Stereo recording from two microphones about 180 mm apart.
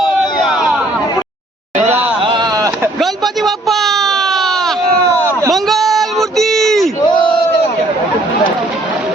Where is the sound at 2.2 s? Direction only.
25° right (ahead or behind).